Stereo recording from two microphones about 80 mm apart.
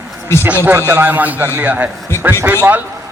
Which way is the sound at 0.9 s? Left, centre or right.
Right.